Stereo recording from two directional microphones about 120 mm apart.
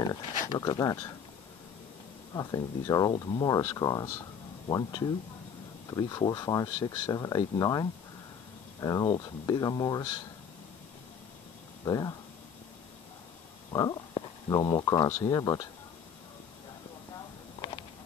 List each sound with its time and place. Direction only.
0.1 s speech: 30° left (ahead or behind)
2.3 s speech: 30° left (ahead or behind)
11.8 s speech: 30° left (ahead or behind)
13.7 s speech: 35° left (ahead or behind)